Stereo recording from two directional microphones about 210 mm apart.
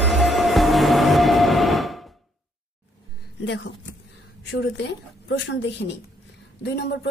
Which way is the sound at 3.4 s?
60° left (ahead or behind).